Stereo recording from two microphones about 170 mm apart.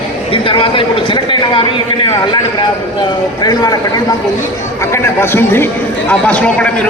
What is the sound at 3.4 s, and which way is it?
A man's voice, 25° left (ahead or behind).